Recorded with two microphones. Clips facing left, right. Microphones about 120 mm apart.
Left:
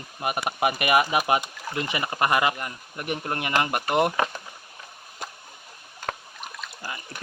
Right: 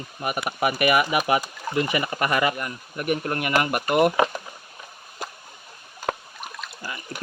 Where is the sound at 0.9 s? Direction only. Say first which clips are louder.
Left 3 dB; 30° left (ahead or behind).